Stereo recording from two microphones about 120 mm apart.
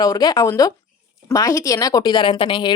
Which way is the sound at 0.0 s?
30° left (ahead or behind).